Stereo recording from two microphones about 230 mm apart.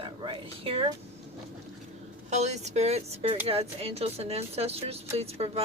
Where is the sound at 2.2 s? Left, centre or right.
Right.